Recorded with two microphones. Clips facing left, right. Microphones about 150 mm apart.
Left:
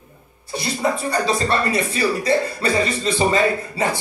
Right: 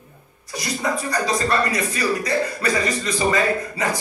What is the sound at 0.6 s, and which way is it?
Speech, 30° left (ahead or behind).